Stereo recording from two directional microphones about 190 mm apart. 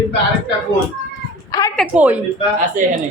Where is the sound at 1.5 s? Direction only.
20° left (ahead or behind).